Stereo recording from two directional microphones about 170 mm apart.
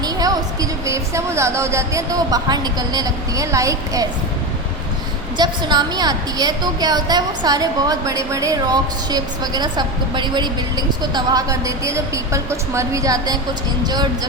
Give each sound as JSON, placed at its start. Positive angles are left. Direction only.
{"t": 0.0, "sound": "speech", "side_deg": -20}
{"t": 5.4, "sound": "a woman's voice", "side_deg": -25}